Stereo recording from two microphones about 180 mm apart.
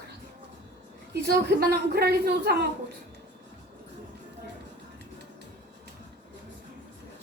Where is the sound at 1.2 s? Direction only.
60° right (ahead or behind).